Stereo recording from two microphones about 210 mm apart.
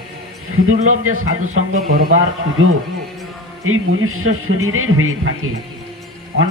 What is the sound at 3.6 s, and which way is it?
A man's voice, 80° right.